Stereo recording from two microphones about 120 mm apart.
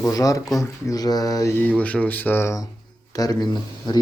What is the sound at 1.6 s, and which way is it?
Speech, 10° left (ahead or behind).